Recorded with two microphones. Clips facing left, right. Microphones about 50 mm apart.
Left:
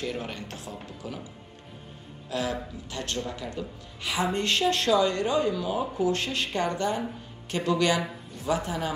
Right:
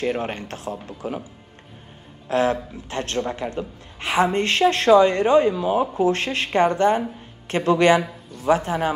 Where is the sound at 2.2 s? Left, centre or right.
Right.